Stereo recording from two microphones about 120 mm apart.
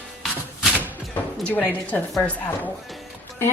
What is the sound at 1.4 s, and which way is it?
Speech, 10° left (ahead or behind).